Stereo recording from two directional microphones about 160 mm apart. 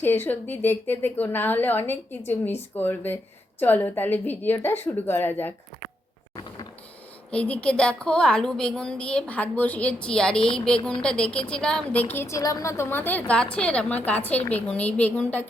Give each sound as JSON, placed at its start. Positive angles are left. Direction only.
{"t": 0.0, "sound": "a woman's voice", "side_deg": 15}
{"t": 7.3, "sound": "a woman's voice", "side_deg": 10}